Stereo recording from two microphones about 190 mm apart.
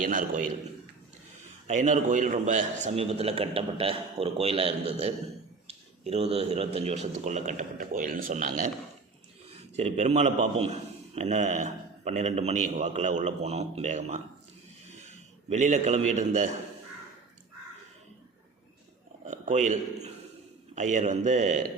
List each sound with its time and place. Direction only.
0.0 s a man's voice: 45° right (ahead or behind)
1.6 s a man's voice: 40° right (ahead or behind)
9.7 s a man's voice: 35° right (ahead or behind)
19.2 s a man's voice: 35° right (ahead or behind)